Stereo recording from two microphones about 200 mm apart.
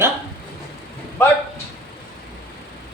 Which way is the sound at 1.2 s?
10° left (ahead or behind).